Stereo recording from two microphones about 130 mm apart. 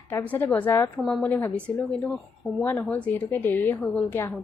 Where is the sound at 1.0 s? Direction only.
Centre (ahead or behind).